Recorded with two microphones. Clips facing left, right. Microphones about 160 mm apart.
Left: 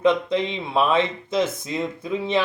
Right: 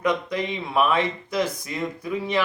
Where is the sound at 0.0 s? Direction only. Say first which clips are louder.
Left 5 dB; 25° left (ahead or behind).